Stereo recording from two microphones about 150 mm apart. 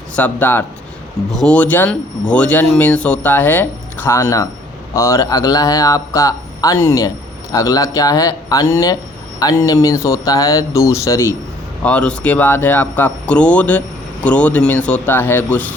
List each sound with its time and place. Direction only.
0.2 s speech: 10° left (ahead or behind)
11.8 s speech: 10° left (ahead or behind)